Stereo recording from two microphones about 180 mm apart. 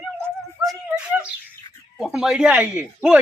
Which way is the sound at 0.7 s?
5° right (ahead or behind).